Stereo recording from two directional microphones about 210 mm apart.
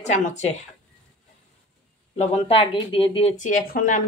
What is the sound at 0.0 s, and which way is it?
Speech, 35° left (ahead or behind).